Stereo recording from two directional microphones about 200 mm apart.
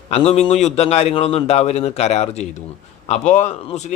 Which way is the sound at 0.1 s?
30° left (ahead or behind).